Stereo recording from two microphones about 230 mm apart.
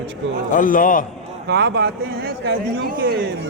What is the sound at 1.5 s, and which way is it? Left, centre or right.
A man's voice, right.